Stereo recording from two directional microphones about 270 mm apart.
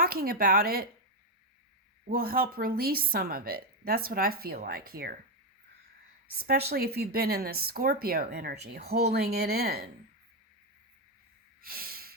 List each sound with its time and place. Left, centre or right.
0.0 s speech: right
2.0 s speech: right
6.4 s speech: right
11.6 s snort: right